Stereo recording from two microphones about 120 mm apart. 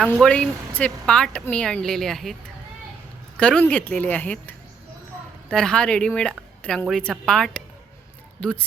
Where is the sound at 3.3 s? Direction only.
10° left (ahead or behind).